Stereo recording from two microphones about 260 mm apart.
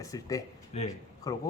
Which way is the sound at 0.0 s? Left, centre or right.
Centre.